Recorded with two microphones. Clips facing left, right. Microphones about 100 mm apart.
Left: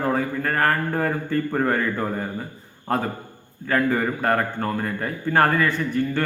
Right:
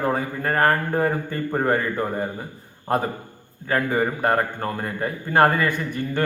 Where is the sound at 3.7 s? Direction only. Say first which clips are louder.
Left 1 dB; 25° right (ahead or behind).